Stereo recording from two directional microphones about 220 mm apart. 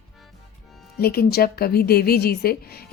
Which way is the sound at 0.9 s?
45° left (ahead or behind).